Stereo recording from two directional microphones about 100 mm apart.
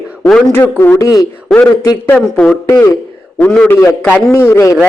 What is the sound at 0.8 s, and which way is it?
Speech, 25° left (ahead or behind).